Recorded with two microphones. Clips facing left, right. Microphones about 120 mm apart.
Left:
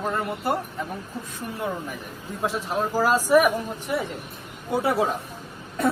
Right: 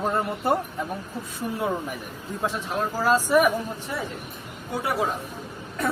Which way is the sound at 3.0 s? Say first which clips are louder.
Left 1 dB; 10° left (ahead or behind).